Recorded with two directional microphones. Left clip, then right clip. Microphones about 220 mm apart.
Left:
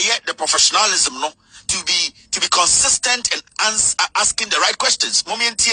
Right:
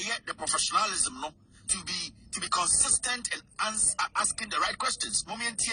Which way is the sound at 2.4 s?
40° left (ahead or behind).